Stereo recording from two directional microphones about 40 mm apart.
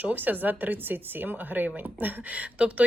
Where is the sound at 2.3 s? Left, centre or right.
Right.